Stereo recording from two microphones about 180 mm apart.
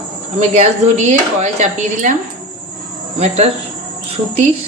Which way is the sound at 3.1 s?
35° right (ahead or behind).